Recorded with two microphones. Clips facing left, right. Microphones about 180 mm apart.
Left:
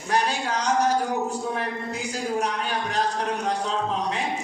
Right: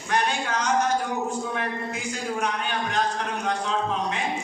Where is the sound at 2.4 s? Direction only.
35° left (ahead or behind).